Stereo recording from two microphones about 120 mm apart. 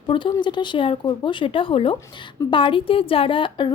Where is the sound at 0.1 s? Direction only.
40° left (ahead or behind).